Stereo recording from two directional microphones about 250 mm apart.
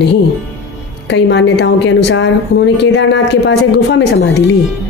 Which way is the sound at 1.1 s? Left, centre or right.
Left.